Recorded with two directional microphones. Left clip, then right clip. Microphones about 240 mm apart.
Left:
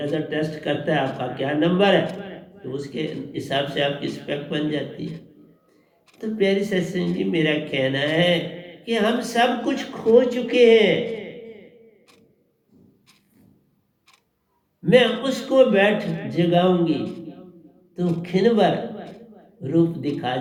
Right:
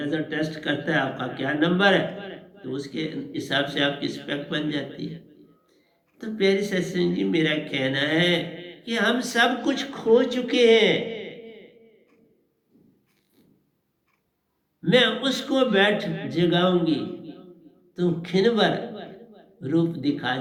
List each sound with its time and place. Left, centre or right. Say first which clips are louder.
0.0 s a man's voice: left 2 dB; right
6.1 s a man's voice: left 1 dB; right
14.8 s a man's voice: left 3 dB; right